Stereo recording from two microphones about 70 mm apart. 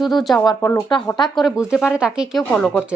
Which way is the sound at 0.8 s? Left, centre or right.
Left.